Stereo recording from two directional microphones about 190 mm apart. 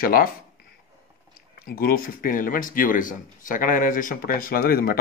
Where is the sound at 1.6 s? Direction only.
50° left (ahead or behind).